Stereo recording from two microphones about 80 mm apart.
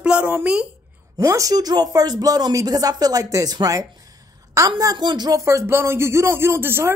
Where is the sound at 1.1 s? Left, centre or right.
Right.